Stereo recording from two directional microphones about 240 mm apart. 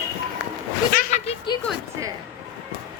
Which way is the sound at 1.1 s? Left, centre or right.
Left.